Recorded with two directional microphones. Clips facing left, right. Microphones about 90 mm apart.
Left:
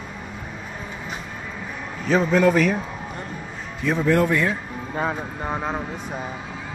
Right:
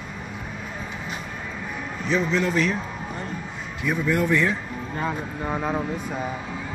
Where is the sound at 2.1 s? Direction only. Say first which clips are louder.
Left 5 dB; 50° left (ahead or behind).